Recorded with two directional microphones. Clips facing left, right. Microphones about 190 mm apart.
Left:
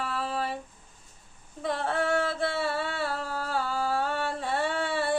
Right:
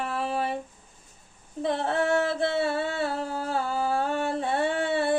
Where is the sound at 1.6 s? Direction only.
20° right (ahead or behind).